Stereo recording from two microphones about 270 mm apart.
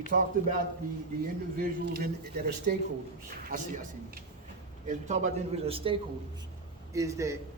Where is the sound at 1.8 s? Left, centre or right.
Right; by 7.3 s centre.